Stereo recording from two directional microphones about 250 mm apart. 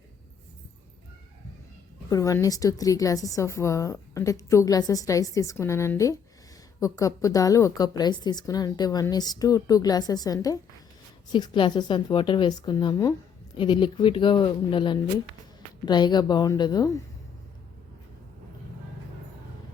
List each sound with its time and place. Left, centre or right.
2.0 s a woman's voice: centre